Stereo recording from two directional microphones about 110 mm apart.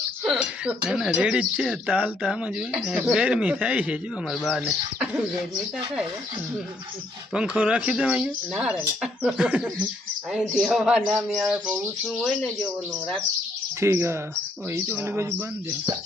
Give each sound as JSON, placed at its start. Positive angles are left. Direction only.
{"t": 0.3, "sound": "speech", "side_deg": -10}
{"t": 7.3, "sound": "a man's voice", "side_deg": -10}
{"t": 13.7, "sound": "speech", "side_deg": -25}